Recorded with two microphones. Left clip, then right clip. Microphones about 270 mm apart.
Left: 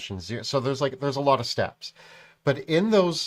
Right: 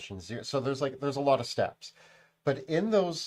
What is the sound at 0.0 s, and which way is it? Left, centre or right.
Speech, left.